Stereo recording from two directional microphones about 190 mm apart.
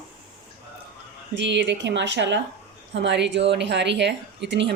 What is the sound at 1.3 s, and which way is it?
Speech, 70° right (ahead or behind).